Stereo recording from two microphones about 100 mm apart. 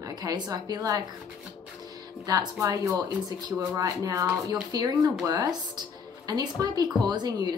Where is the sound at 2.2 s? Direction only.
40° right (ahead or behind).